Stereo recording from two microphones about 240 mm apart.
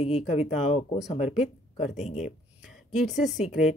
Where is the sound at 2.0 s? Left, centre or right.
Left.